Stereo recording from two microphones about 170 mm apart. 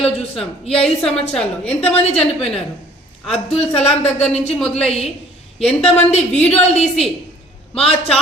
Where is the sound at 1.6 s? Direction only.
35° left (ahead or behind).